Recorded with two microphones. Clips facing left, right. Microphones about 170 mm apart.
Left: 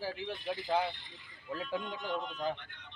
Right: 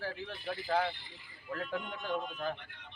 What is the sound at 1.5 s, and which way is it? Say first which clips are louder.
Speech: left 1 dB; 25° left (ahead or behind).